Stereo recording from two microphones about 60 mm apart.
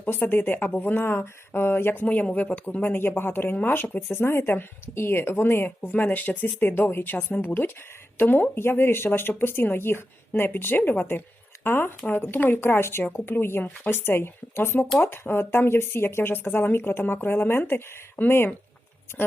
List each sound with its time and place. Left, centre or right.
0.0 s speech: left
2.0 s speech: left
2.8 s speech: left
4.2 s speech: left